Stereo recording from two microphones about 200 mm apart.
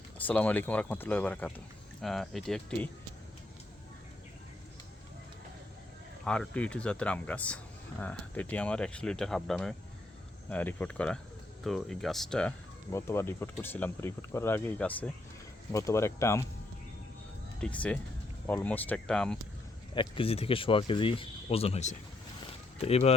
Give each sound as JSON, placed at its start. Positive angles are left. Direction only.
{"t": 0.3, "sound": "speech", "side_deg": 10}
{"t": 6.2, "sound": "speech", "side_deg": 5}
{"t": 17.6, "sound": "speech", "side_deg": 5}
{"t": 19.9, "sound": "speech", "side_deg": 25}